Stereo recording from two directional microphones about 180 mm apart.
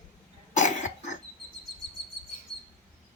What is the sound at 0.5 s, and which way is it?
Cough, 40° left (ahead or behind).